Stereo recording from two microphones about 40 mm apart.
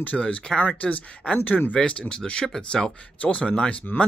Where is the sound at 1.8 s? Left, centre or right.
Left.